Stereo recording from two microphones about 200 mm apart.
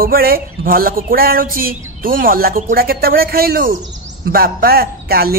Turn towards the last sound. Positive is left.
turn(degrees=-50)  # may be behind; listen again after turning